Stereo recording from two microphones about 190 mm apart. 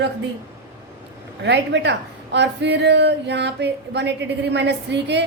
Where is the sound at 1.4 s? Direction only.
65° right (ahead or behind).